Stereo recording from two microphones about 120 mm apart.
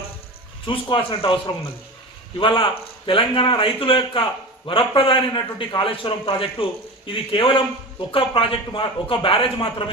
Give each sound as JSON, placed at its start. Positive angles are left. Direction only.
{"t": 0.7, "sound": "a man's voice", "side_deg": 45}
{"t": 2.4, "sound": "a man's voice", "side_deg": 45}